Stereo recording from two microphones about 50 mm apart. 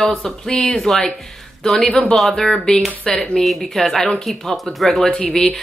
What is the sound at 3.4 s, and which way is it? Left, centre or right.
Speech, centre.